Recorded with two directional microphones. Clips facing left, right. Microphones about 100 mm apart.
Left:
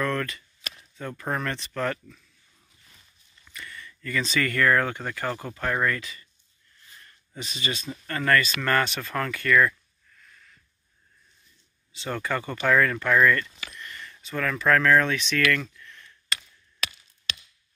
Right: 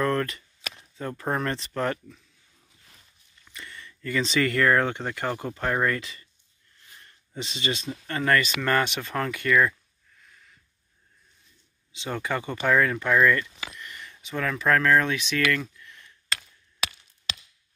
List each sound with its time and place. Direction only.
0.0 s chop: 30° right (ahead or behind)
1.2 s speech: 25° right (ahead or behind)
3.4 s speech: 25° right (ahead or behind)
7.0 s a sound: 25° right (ahead or behind)
8.1 s speech: 20° right (ahead or behind)
11.9 s speech: 20° right (ahead or behind)
15.5 s a sound: 15° right (ahead or behind)